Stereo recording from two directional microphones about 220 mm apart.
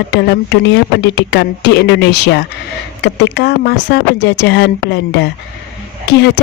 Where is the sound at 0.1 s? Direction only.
50° left (ahead or behind).